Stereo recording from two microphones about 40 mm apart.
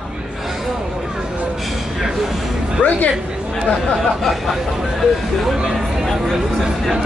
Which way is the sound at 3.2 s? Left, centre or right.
Centre.